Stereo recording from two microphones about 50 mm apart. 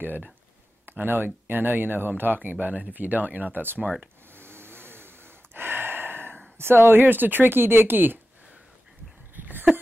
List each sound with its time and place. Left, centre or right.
0.8 s speech: right
4.4 s gasp: right
6.6 s speech: right
9.3 s a sound: right